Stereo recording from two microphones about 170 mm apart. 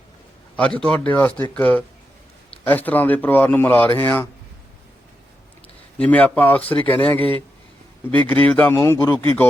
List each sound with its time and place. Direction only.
0.5 s speech: 5° left (ahead or behind)
6.0 s speech: 10° left (ahead or behind)
8.3 s speech: 10° left (ahead or behind)